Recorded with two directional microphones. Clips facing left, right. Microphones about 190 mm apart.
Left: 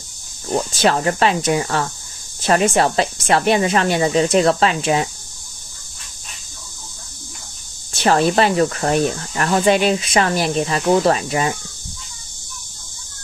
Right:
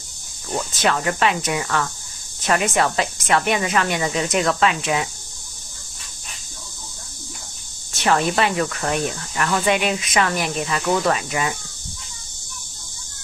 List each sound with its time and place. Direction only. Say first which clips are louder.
0.5 s speech: left 4 dB; 30° left (ahead or behind)
7.9 s speech: left 4 dB; 35° left (ahead or behind)